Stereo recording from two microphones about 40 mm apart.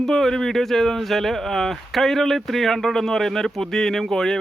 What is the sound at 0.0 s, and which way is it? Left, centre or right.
Speech, centre.